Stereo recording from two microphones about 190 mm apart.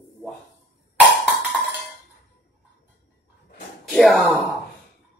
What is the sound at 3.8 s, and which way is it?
Speech, centre (ahead or behind).